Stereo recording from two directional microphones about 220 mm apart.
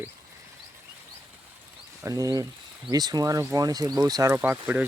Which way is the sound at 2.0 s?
15° right (ahead or behind).